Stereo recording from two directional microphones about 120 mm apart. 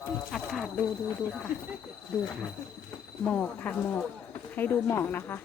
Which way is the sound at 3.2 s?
10° left (ahead or behind).